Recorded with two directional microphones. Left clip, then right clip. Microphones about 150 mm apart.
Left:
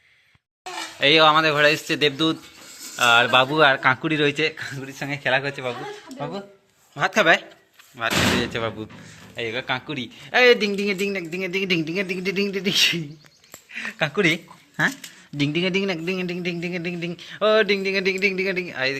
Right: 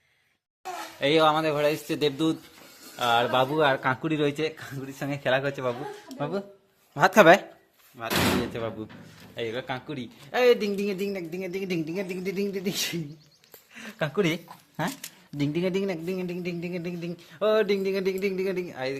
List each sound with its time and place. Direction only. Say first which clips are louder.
0.9 s speech: left 6 dB; 10° right (ahead or behind)
2.9 s a man's voice: left 7 dB; 5° right (ahead or behind)
3.8 s speech: left 6 dB; 15° right (ahead or behind)
4.8 s speech: left 2 dB; 35° right (ahead or behind)
6.1 s speech: right 1 dB; 90° right
6.9 s speech: right 1 dB; 50° right (ahead or behind)
7.9 s a man's voice: left 5 dB; centre (ahead or behind)
9.3 s speech: left 6 dB; 20° right (ahead or behind); by 13.0 s 5° right (ahead or behind)
13.7 s a man's voice: left 5 dB; 20° right (ahead or behind)
17.7 s speech: left 5 dB; 20° right (ahead or behind)